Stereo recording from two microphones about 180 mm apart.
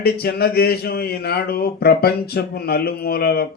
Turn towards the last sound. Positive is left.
turn(degrees=60)  # may be behind; listen again after turning